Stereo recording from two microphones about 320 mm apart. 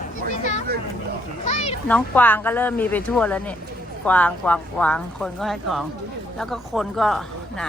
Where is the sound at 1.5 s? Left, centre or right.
Centre.